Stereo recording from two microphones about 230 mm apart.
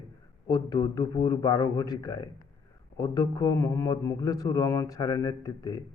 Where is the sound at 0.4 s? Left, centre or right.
Centre.